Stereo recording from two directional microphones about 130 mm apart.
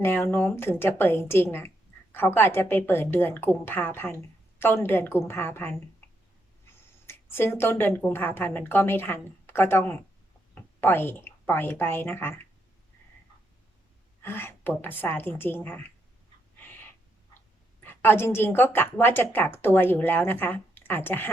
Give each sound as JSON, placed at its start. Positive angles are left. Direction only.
{"t": 0.0, "sound": "a woman's voice", "side_deg": 20}
{"t": 7.1, "sound": "a woman's voice", "side_deg": 20}
{"t": 14.2, "sound": "a woman's voice", "side_deg": 15}
{"t": 17.8, "sound": "a woman's voice", "side_deg": 15}